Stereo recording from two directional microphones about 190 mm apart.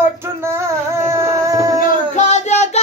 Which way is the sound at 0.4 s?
15° right (ahead or behind).